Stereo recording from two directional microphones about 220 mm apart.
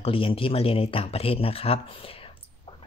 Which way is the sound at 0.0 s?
25° left (ahead or behind).